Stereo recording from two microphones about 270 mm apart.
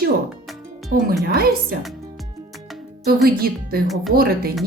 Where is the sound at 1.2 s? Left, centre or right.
Right.